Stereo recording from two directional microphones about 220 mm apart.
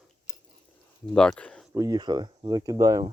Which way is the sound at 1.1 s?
5° left (ahead or behind).